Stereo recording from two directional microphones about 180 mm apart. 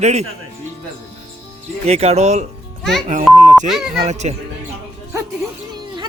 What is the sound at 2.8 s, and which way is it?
Music, centre (ahead or behind).